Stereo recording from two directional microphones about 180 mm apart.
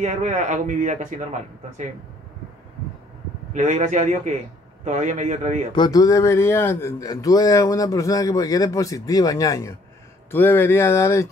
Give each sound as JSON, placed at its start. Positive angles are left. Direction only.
{"t": 0.0, "sound": "speech", "side_deg": -40}
{"t": 3.5, "sound": "speech", "side_deg": -45}
{"t": 5.8, "sound": "speech", "side_deg": 20}